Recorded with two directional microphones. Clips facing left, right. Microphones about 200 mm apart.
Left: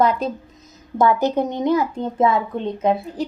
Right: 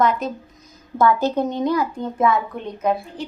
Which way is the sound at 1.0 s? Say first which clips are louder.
Left 1 dB; 20° left (ahead or behind).